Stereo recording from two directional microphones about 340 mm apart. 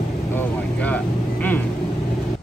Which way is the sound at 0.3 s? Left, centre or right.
Centre.